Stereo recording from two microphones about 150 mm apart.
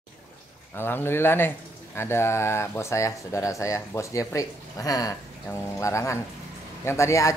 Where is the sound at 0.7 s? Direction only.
15° left (ahead or behind).